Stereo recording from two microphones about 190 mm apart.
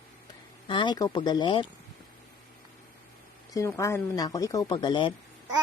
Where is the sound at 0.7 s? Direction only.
25° left (ahead or behind).